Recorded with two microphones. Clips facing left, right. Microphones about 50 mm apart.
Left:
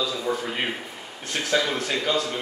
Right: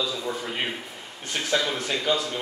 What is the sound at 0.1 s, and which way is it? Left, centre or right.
A man's voice, centre.